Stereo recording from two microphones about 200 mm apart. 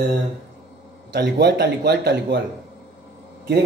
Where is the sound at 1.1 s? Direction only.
55° right (ahead or behind).